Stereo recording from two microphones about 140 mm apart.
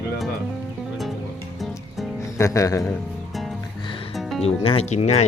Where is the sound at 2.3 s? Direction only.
20° left (ahead or behind).